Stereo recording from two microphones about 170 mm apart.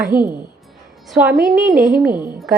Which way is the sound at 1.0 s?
Centre (ahead or behind).